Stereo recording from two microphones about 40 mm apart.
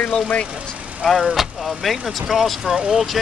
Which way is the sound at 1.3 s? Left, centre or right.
Centre.